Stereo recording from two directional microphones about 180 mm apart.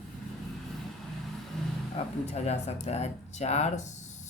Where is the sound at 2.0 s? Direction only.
35° left (ahead or behind).